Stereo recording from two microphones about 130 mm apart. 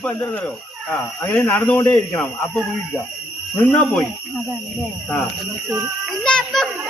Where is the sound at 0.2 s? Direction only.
15° left (ahead or behind).